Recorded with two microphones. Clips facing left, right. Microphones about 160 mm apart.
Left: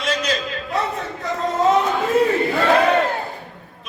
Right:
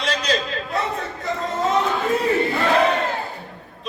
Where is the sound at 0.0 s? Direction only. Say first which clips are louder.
Left 1 dB; 30° right (ahead or behind).